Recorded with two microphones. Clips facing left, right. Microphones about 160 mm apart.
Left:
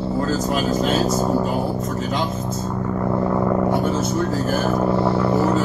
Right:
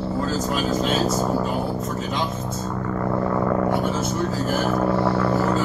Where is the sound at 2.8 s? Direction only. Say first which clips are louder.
Left 2 dB; 15° left (ahead or behind).